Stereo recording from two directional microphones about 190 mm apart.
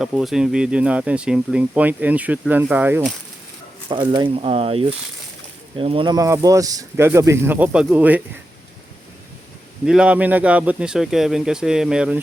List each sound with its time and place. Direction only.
0.0 s speech: centre (ahead or behind)
3.8 s speech: 25° right (ahead or behind); by 8.2 s 10° right (ahead or behind)
9.8 s speech: 5° right (ahead or behind)